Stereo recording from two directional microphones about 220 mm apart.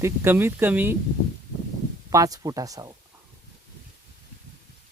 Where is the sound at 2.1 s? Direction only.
15° right (ahead or behind).